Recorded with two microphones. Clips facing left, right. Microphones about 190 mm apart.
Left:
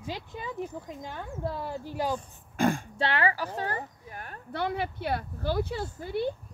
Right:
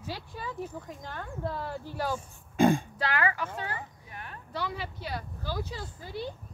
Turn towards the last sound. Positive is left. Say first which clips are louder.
# left 7 dB
turn(degrees=55)  # may be behind; listen again after turning